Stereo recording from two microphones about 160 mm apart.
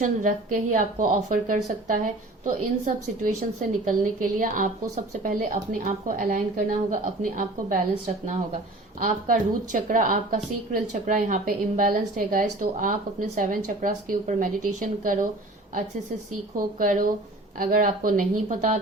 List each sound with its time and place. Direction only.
0.0 s a woman's voice: 55° right (ahead or behind)
9.0 s a woman's voice: 55° right (ahead or behind)
16.6 s a woman's voice: 60° right (ahead or behind)